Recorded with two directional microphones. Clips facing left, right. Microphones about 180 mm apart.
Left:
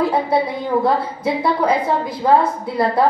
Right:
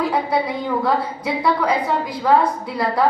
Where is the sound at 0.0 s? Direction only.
25° left (ahead or behind).